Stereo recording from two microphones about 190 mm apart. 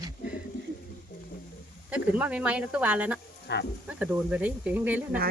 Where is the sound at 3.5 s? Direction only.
65° left (ahead or behind).